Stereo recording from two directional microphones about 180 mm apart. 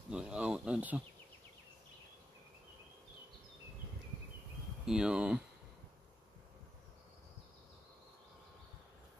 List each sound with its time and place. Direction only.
0.1 s speech: 5° right (ahead or behind)
4.8 s speech: 5° right (ahead or behind)